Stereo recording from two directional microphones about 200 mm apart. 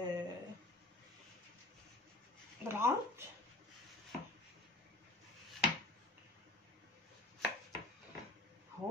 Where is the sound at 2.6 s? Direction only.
10° right (ahead or behind).